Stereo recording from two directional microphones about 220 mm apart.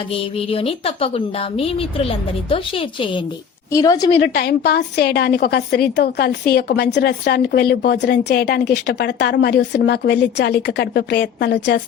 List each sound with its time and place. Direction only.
0.1 s a woman's voice: 25° left (ahead or behind)
4.2 s a woman's voice: 50° left (ahead or behind)